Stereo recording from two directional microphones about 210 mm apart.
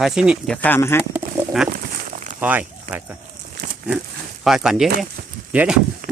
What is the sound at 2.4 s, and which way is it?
Speech, 5° right (ahead or behind).